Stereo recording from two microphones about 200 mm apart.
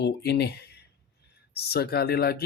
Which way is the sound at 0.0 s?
55° left (ahead or behind).